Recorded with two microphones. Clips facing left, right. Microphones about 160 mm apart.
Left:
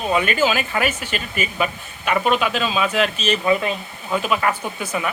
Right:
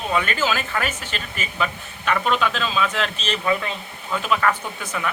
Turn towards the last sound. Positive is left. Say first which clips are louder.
# left 3 dB
turn(degrees=15)  # may be behind; listen again after turning